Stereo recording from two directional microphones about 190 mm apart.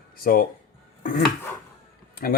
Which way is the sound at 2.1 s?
50° left (ahead or behind).